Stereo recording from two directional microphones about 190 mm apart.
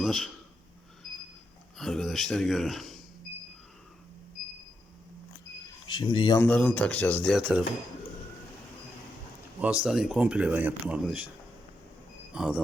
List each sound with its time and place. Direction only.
0.0 s speech: centre (ahead or behind)
1.8 s speech: centre (ahead or behind)
5.9 s speech: 25° left (ahead or behind)
6.4 s speech: 5° left (ahead or behind)
7.3 s speech: 5° right (ahead or behind)
9.6 s speech: 5° right (ahead or behind)
12.3 s speech: 5° right (ahead or behind)